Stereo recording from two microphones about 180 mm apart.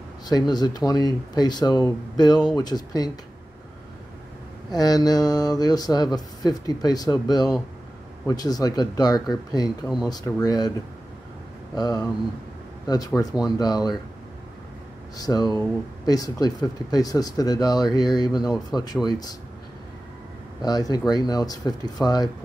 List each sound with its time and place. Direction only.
0.3 s speech: 20° left (ahead or behind)
4.7 s speech: 20° left (ahead or behind)
11.7 s speech: 20° left (ahead or behind)
15.1 s speech: 20° left (ahead or behind)
20.6 s speech: 20° left (ahead or behind)